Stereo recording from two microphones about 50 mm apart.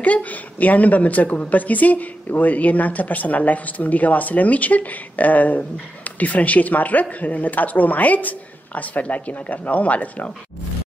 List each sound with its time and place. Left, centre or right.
0.0 s a woman's voice: left